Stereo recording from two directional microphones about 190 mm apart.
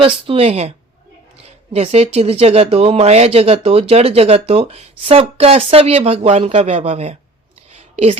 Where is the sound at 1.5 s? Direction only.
35° right (ahead or behind).